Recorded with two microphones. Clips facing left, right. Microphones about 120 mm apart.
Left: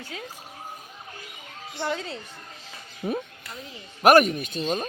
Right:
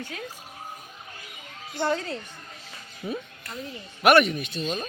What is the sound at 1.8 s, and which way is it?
Speech, 15° left (ahead or behind).